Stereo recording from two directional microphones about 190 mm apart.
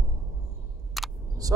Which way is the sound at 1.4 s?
20° right (ahead or behind).